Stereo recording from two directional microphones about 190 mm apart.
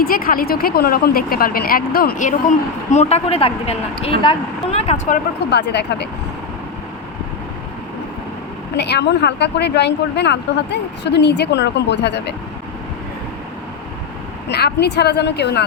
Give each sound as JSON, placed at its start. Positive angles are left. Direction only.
{"t": 0.0, "sound": "speech", "side_deg": 50}
{"t": 5.5, "sound": "a woman's voice", "side_deg": 60}
{"t": 8.7, "sound": "a woman's voice", "side_deg": 60}
{"t": 14.5, "sound": "a woman's voice", "side_deg": 60}